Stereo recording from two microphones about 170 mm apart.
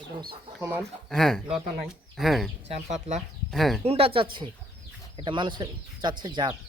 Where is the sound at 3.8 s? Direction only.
35° right (ahead or behind).